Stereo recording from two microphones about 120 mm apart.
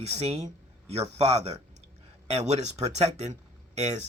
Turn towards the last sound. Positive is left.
turn(degrees=-70)  # may be behind; listen again after turning